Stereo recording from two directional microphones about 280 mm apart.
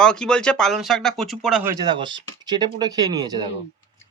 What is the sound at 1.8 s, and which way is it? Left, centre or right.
Speech, centre.